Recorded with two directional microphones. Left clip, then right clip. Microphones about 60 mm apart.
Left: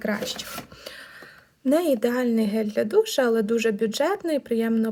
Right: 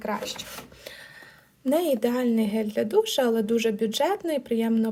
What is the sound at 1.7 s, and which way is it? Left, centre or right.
A woman's voice, left.